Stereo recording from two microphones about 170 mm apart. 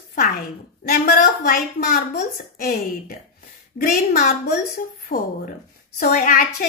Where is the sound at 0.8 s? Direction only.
60° left (ahead or behind).